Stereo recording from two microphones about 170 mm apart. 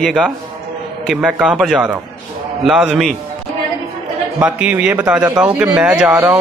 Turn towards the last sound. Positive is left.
turn(degrees=-10)  # may be behind; listen again after turning